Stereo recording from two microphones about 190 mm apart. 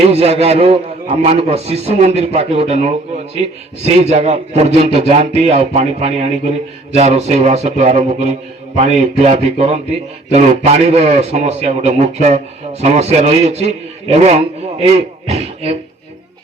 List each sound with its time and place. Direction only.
0.1 s a man's voice: 35° right (ahead or behind)